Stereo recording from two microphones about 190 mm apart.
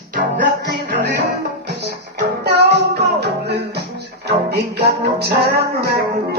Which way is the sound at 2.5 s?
55° right (ahead or behind).